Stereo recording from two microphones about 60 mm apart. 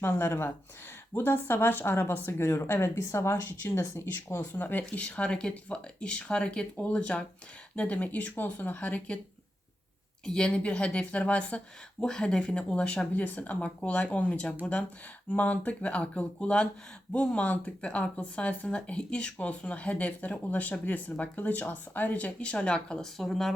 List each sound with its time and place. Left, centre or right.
0.0 s speech: left
3.4 s speech: left
4.8 s speech: centre
10.2 s speech: centre
23.1 s speech: centre